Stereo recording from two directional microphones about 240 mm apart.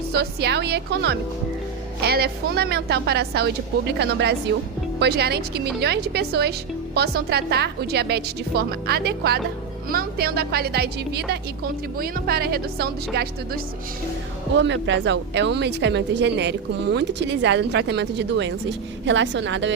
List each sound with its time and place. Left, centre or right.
0.1 s a woman's voice: right